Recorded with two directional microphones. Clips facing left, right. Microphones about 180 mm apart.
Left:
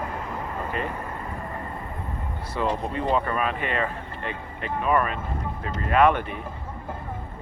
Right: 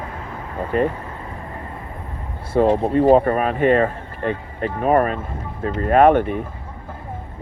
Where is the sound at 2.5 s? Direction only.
45° right (ahead or behind).